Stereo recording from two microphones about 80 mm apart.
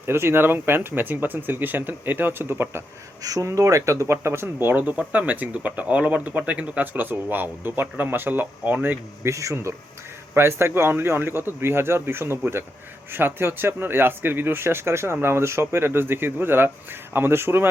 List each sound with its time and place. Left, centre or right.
0.0 s speech: right
3.2 s speech: right
9.3 s speech: right